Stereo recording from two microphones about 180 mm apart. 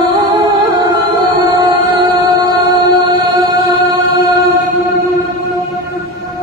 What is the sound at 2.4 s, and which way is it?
Music, 25° right (ahead or behind).